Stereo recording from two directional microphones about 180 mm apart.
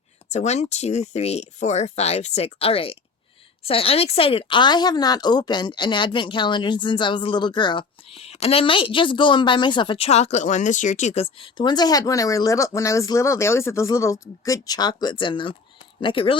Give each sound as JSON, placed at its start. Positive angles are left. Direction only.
{"t": 0.3, "sound": "speech", "side_deg": 40}